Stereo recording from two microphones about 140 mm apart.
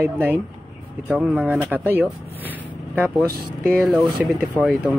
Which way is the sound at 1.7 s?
15° right (ahead or behind).